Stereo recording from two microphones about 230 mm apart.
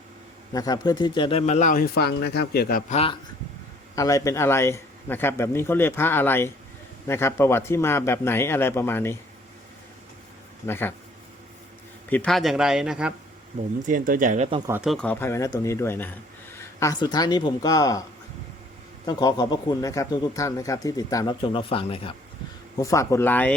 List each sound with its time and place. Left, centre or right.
0.5 s speech: centre; by 3.0 s left
3.9 s a man's voice: centre
10.7 s a man's voice: centre
12.0 s speech: centre
13.8 s speech: right
14.7 s a man's voice: centre
19.0 s a man's voice: centre
22.8 s a man's voice: centre